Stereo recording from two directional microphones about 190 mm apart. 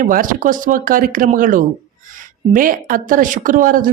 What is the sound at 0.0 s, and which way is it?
Speech, 45° right (ahead or behind).